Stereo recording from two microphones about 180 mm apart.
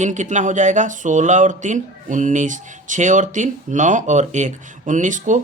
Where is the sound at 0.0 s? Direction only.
40° right (ahead or behind).